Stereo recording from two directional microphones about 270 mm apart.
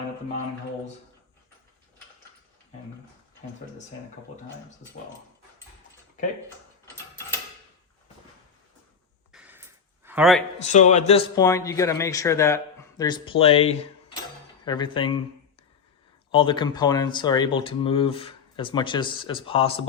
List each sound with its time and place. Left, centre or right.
9.3 s a sound: centre
10.6 s speech: left
11.3 s speech: centre
16.3 s speech: centre